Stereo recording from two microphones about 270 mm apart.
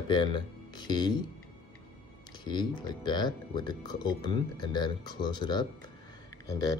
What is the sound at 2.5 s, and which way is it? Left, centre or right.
Speech, centre.